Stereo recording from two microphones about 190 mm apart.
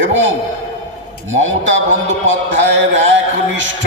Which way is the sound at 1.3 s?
90° right.